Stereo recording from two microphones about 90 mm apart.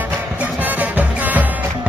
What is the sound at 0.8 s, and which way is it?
Music, 20° right (ahead or behind).